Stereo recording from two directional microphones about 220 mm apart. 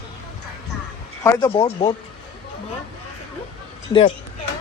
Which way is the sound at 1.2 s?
15° left (ahead or behind).